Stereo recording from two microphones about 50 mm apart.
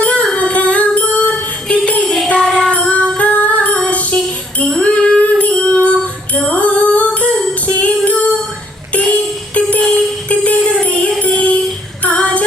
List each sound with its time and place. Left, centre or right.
0.0 s music: left
6.3 s female singing: left
7.8 s music: left